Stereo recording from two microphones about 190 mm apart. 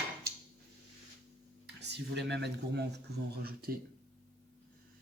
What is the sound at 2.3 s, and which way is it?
Speech, 65° right (ahead or behind).